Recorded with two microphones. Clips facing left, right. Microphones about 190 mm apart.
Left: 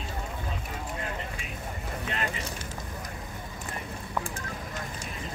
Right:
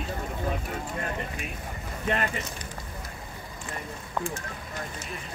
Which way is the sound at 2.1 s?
55° right (ahead or behind).